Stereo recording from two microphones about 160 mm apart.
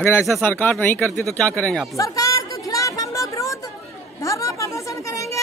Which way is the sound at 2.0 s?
20° left (ahead or behind).